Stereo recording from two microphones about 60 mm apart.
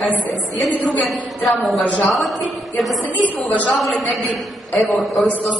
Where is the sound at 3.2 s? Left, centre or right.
Left.